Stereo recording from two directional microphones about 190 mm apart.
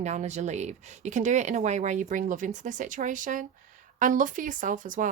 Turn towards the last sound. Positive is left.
turn(degrees=-45)  # may be behind; listen again after turning